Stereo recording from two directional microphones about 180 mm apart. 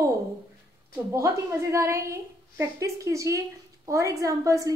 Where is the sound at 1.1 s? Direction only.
15° right (ahead or behind).